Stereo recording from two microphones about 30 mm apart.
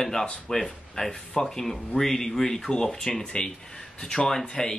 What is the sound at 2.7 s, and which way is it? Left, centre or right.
Speech, left.